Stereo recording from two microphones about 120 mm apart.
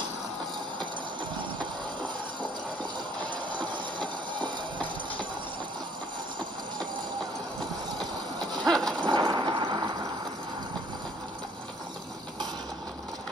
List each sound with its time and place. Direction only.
8.0 s vehicle: 35° right (ahead or behind)
8.6 s horse: 5° left (ahead or behind)
9.0 s a sound: 40° right (ahead or behind)